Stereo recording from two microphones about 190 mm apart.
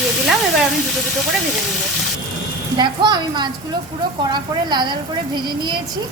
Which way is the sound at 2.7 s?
20° right (ahead or behind).